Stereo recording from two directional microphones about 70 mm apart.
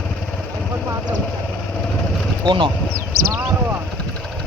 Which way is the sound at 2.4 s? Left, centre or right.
Right.